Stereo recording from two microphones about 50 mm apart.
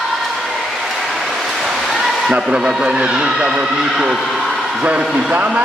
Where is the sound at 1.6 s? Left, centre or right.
Centre.